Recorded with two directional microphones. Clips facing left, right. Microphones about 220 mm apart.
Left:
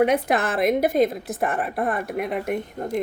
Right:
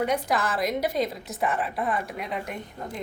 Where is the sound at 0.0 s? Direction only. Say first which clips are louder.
Left 6 dB; 60° left (ahead or behind).